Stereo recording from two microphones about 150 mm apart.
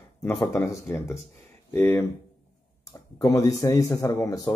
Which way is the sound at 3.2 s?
25° left (ahead or behind).